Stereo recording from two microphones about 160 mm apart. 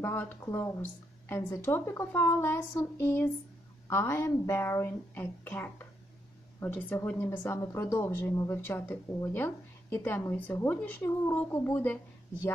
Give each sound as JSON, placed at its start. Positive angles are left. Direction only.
{"t": 0.0, "sound": "speech", "side_deg": 15}